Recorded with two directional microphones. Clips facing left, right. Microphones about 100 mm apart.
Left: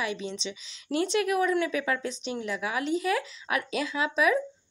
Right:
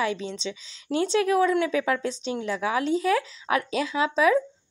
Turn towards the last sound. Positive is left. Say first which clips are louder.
# right 4 dB
turn(degrees=-30)  # may be behind; listen again after turning